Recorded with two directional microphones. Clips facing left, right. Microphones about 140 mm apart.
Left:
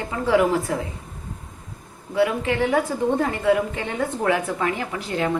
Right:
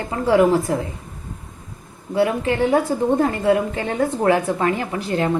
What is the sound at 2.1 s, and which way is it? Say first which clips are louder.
A woman's voice: right 2 dB; 35° right (ahead or behind).